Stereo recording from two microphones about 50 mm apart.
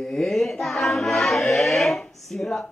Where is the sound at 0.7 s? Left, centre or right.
Centre.